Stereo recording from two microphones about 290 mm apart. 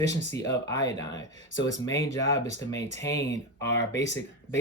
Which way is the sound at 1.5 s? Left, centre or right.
Left.